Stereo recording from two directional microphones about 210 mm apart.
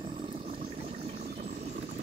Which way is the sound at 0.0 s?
30° right (ahead or behind).